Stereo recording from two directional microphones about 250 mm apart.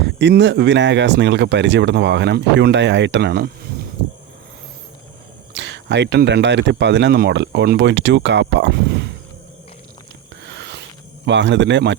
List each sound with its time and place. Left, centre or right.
0.0 s speech: right
5.5 s speech: right
10.4 s a sound: right
11.3 s speech: right